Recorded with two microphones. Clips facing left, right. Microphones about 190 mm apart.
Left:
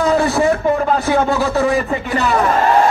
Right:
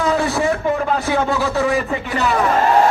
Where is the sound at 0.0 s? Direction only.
45° left (ahead or behind).